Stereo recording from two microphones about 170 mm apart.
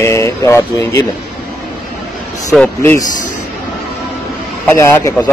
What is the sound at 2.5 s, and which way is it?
Speech, 10° left (ahead or behind).